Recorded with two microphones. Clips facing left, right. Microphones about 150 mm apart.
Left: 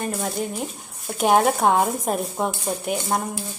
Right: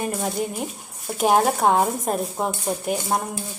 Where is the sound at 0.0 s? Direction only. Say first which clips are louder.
Right 1 dB; 5° right (ahead or behind).